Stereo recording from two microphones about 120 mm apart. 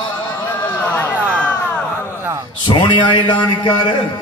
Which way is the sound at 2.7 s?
40° left (ahead or behind).